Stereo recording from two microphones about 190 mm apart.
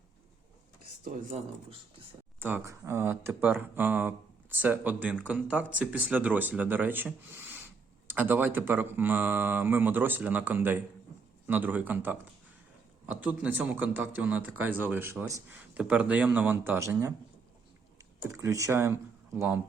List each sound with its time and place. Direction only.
1.0 s speech: 40° right (ahead or behind)
2.4 s speech: 10° right (ahead or behind)
18.3 s speech: 15° right (ahead or behind)